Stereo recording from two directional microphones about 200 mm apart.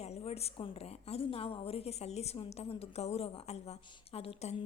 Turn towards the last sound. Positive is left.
turn(degrees=30)  # may be behind; listen again after turning